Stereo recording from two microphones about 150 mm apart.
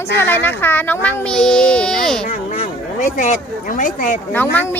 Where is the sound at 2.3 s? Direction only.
55° left (ahead or behind).